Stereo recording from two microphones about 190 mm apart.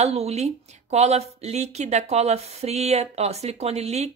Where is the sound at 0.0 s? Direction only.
35° right (ahead or behind).